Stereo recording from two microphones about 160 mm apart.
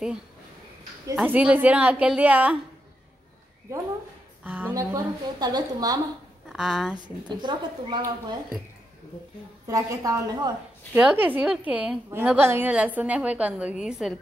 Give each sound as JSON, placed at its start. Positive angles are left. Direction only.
{"t": 1.1, "sound": "a woman's voice", "side_deg": -10}
{"t": 4.5, "sound": "a woman's voice", "side_deg": -10}
{"t": 4.7, "sound": "a woman's voice", "side_deg": -25}
{"t": 6.5, "sound": "a woman's voice", "side_deg": 0}
{"t": 7.0, "sound": "a woman's voice", "side_deg": -30}
{"t": 9.7, "sound": "a woman's voice", "side_deg": -20}
{"t": 11.0, "sound": "a woman's voice", "side_deg": -10}